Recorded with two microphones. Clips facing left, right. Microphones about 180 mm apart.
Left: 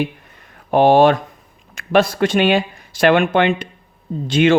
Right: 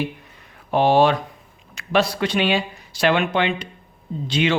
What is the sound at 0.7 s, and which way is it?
Speech, 50° left (ahead or behind).